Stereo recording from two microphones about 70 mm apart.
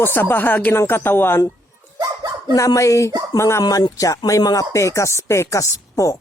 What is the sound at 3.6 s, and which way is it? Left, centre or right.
Speech, left.